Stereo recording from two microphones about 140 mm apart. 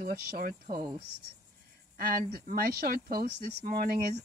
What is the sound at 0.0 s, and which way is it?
Speech, 90° right.